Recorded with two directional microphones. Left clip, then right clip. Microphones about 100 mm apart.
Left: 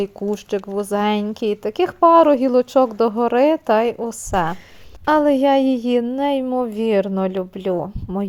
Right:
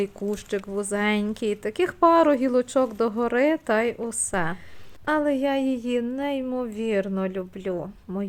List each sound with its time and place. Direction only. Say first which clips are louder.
0.0 s speech: left 5 dB; 20° left (ahead or behind)
5.0 s a woman's voice: left 8 dB; 50° left (ahead or behind)
8.1 s speech: left 6 dB; 35° left (ahead or behind)